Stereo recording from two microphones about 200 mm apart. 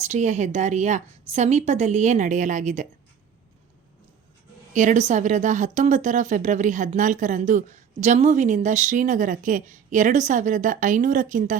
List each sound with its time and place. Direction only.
0.1 s speech: 35° right (ahead or behind)
4.7 s speech: 40° right (ahead or behind)